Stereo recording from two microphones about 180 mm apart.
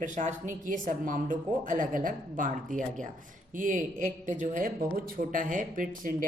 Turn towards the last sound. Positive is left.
turn(degrees=-50)  # may be behind; listen again after turning